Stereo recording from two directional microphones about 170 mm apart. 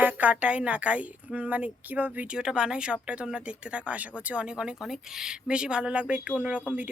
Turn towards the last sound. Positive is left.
turn(degrees=-10)  # may be behind; listen again after turning